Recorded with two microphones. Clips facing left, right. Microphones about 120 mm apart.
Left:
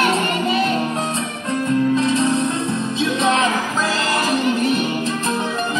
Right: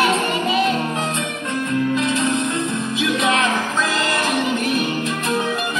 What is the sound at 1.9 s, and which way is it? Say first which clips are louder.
Music: left 2 dB; 30° left (ahead or behind).